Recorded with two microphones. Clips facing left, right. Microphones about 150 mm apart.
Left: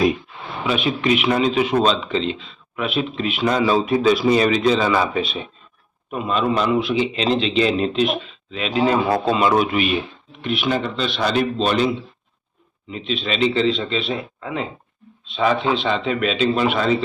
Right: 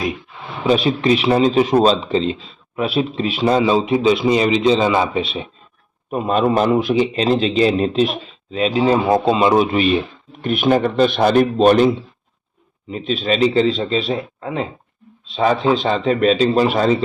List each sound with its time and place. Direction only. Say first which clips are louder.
0.6 s speech: right 5 dB; 35° right (ahead or behind)
6.1 s speech: right 4 dB; 45° right (ahead or behind)
10.4 s a man's voice: right 6 dB; 45° right (ahead or behind)